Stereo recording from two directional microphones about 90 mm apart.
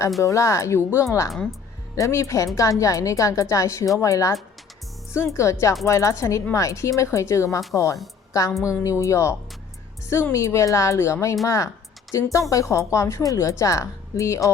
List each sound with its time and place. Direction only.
0.2 s a woman's voice: 35° left (ahead or behind)
1.3 s speech: centre (ahead or behind)
2.0 s a woman's voice: 35° left (ahead or behind)
10.3 s a woman's voice: 35° left (ahead or behind)